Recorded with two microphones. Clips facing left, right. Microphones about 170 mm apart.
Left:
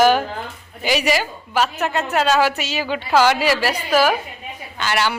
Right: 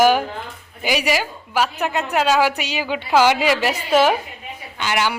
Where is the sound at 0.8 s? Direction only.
10° right (ahead or behind).